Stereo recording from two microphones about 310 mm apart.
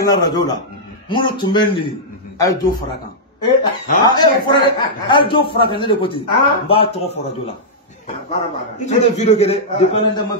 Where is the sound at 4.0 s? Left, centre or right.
Centre.